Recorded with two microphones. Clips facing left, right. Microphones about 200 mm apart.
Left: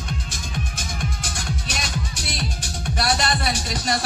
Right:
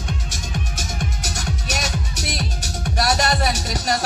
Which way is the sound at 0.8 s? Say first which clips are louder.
Right 2 dB; 40° right (ahead or behind).